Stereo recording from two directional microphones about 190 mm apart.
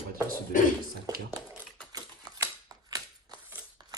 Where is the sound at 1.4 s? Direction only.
20° right (ahead or behind).